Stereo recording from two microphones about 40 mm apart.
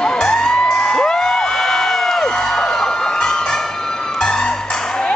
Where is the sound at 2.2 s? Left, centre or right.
Centre.